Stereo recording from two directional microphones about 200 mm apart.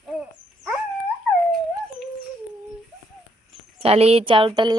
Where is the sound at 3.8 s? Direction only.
30° right (ahead or behind).